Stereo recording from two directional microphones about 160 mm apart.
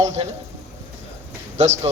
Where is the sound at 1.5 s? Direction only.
45° right (ahead or behind).